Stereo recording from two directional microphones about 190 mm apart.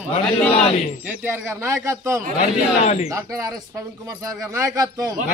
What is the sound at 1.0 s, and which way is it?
A man's voice, 10° right (ahead or behind).